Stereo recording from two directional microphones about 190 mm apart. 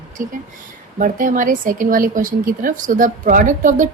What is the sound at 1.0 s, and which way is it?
A woman's voice, 45° right (ahead or behind).